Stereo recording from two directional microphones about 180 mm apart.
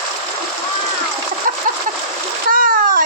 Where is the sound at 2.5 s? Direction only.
50° right (ahead or behind).